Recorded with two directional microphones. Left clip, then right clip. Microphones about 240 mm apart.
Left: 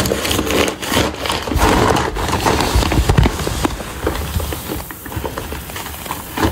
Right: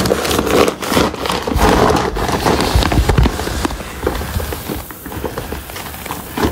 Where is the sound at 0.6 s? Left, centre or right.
Right.